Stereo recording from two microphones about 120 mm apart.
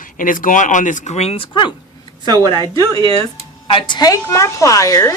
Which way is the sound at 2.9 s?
50° right (ahead or behind).